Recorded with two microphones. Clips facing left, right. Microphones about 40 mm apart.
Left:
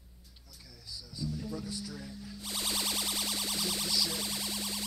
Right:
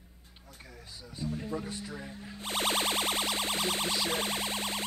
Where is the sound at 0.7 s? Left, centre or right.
Right.